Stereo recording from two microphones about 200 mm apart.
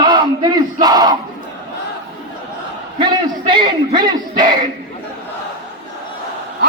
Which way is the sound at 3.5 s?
25° right (ahead or behind).